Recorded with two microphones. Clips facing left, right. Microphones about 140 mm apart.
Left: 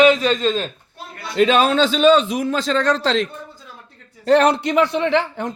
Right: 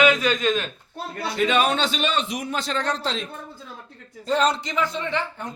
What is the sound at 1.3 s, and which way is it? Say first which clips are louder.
A man's voice: left 6 dB; 90° left.